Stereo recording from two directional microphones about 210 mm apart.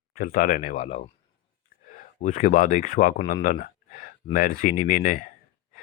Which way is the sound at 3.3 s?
40° left (ahead or behind).